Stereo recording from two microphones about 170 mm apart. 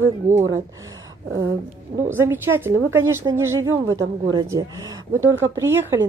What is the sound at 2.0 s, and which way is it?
Speech, 15° right (ahead or behind).